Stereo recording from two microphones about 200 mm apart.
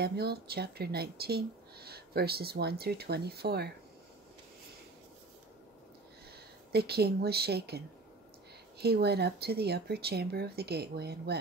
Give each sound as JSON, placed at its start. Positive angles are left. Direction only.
{"t": 0.0, "sound": "speech", "side_deg": -50}
{"t": 6.7, "sound": "speech", "side_deg": -50}